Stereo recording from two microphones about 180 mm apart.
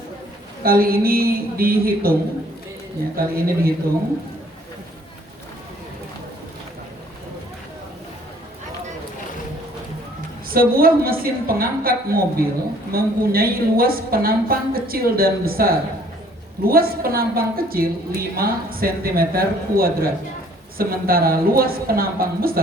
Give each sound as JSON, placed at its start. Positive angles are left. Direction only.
{"t": 0.6, "sound": "a woman's voice", "side_deg": -55}
{"t": 3.2, "sound": "a woman's voice", "side_deg": -55}
{"t": 10.5, "sound": "a woman's voice", "side_deg": -55}